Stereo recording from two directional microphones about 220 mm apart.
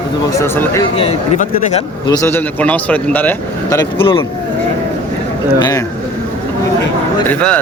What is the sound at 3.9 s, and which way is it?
Speech, 25° left (ahead or behind).